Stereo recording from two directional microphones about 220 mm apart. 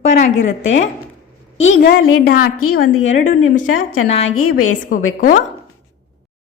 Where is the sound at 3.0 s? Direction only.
35° left (ahead or behind).